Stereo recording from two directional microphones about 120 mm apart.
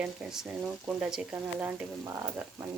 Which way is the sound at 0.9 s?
5° right (ahead or behind).